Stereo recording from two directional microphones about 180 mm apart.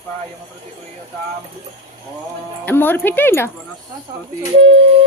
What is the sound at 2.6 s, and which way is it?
Speech, 10° left (ahead or behind).